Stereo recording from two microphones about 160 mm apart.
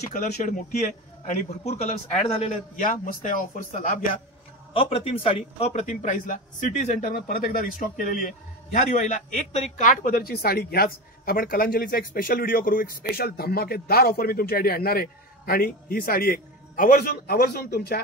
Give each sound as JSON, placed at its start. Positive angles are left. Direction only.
{"t": 0.1, "sound": "speech", "side_deg": 55}
{"t": 1.2, "sound": "a man's voice", "side_deg": 40}
{"t": 4.7, "sound": "a man's voice", "side_deg": 35}
{"t": 10.0, "sound": "speech", "side_deg": 70}